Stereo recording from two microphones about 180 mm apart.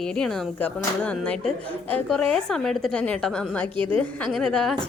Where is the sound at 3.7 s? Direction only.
30° right (ahead or behind).